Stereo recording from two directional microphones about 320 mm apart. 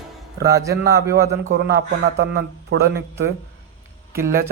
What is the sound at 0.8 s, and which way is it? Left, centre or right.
Speech, right.